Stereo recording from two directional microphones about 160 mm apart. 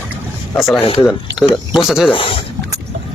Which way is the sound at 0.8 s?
35° left (ahead or behind).